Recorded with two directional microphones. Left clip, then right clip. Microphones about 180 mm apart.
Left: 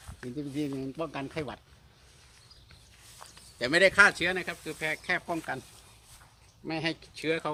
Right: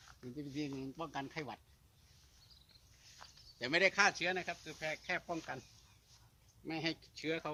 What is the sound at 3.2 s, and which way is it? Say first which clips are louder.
Speech: left 10 dB; centre (ahead or behind).